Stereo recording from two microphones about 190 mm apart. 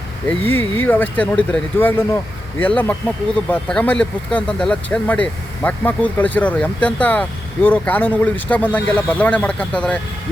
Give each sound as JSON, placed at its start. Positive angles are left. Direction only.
{"t": 0.3, "sound": "speech", "side_deg": 10}